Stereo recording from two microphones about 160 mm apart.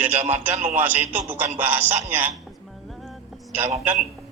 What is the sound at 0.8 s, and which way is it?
Speech, 10° right (ahead or behind).